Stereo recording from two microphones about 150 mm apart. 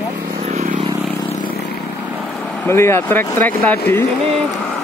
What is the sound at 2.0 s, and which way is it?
Vehicle, 10° right (ahead or behind).